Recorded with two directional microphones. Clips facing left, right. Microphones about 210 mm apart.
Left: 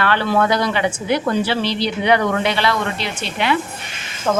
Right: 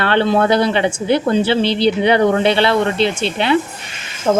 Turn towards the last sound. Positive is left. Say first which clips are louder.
# right 4 dB
turn(degrees=-25)  # may be behind; listen again after turning